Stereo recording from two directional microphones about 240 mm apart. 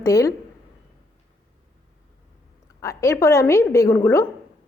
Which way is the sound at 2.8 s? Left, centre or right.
Centre.